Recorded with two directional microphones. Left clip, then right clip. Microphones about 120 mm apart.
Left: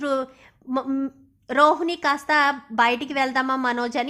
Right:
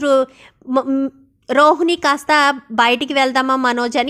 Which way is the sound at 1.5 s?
40° right (ahead or behind).